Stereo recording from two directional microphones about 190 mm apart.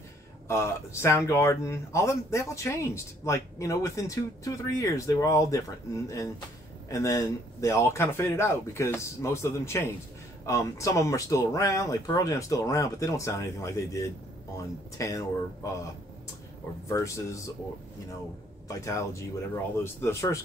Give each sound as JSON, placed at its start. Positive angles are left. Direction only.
{"t": 0.5, "sound": "a man's voice", "side_deg": 15}
{"t": 16.8, "sound": "a man's voice", "side_deg": 15}
{"t": 18.7, "sound": "a man's voice", "side_deg": 15}